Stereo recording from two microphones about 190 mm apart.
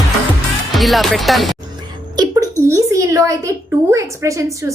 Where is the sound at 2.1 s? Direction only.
20° right (ahead or behind).